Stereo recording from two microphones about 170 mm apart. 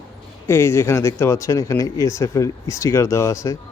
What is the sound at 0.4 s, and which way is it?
Speech, 15° left (ahead or behind).